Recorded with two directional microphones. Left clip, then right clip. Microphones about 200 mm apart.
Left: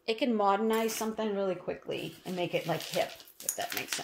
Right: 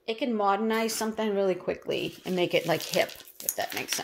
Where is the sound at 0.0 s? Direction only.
Centre (ahead or behind); by 2.8 s 40° right (ahead or behind).